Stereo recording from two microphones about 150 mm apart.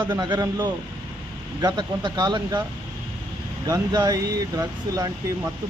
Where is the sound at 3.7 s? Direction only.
25° right (ahead or behind).